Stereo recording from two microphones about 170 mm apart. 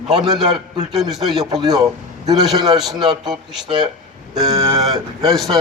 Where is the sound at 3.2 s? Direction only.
5° right (ahead or behind).